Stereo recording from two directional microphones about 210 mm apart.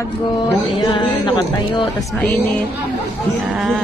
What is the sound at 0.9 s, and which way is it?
Speech, 20° left (ahead or behind).